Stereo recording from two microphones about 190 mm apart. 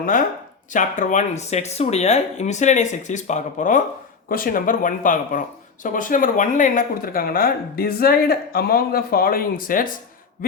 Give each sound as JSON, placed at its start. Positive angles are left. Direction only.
{"t": 0.0, "sound": "speech", "side_deg": 45}